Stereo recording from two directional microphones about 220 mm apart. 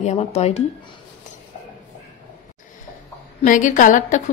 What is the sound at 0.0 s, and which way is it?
Speech, 30° left (ahead or behind).